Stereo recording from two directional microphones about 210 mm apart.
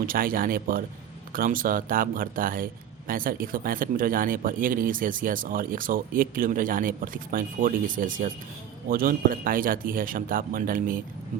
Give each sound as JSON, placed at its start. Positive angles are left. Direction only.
{"t": 0.0, "sound": "speech", "side_deg": -45}